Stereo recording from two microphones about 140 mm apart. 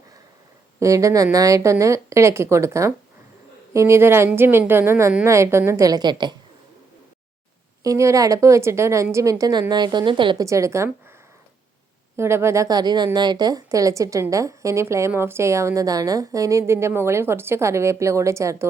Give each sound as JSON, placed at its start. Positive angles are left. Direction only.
{"t": 0.8, "sound": "a woman's voice", "side_deg": -20}
{"t": 7.9, "sound": "a woman's voice", "side_deg": -25}
{"t": 10.4, "sound": "speech", "side_deg": -20}
{"t": 12.1, "sound": "speech", "side_deg": -20}